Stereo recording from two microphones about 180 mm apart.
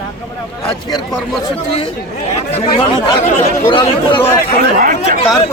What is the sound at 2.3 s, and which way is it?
Speech, 35° left (ahead or behind).